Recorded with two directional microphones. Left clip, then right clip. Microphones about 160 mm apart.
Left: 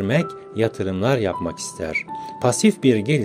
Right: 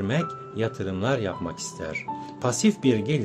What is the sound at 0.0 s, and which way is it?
Speech, 35° left (ahead or behind).